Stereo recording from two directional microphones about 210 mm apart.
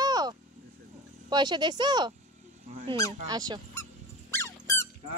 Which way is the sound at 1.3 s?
20° right (ahead or behind).